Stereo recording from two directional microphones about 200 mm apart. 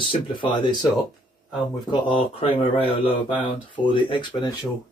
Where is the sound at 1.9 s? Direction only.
25° left (ahead or behind).